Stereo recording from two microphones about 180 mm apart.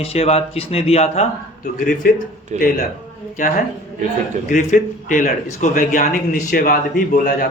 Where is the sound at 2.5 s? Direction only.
40° right (ahead or behind).